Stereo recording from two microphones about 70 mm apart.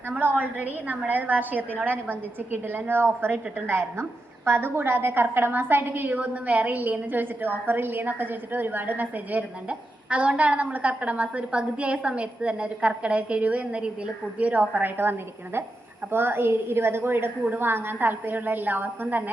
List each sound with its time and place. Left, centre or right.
0.2 s a woman's voice: right
16.1 s a woman's voice: right